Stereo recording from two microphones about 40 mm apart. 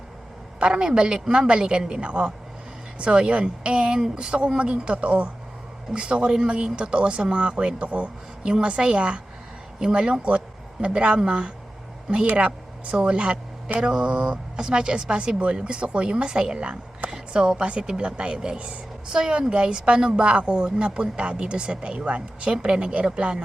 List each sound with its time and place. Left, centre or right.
0.6 s a woman's voice: right
12.2 s a woman's voice: right